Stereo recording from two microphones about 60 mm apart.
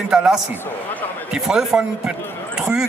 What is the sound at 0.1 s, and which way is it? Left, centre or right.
Speech, centre.